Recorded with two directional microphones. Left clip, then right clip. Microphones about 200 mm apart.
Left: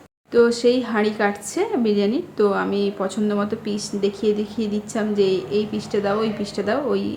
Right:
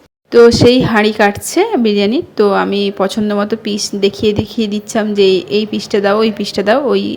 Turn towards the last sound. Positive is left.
turn(degrees=-40)  # may be behind; listen again after turning